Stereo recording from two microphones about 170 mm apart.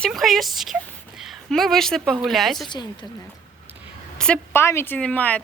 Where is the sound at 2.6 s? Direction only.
25° left (ahead or behind).